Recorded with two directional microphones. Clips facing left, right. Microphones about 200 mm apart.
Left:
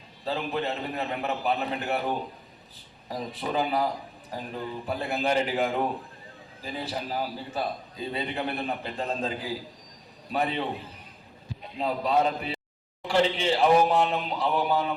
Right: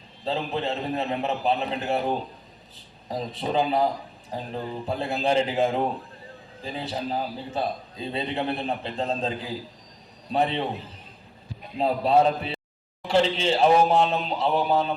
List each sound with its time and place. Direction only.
0.3 s a man's voice: 25° right (ahead or behind)
11.8 s a man's voice: 30° right (ahead or behind)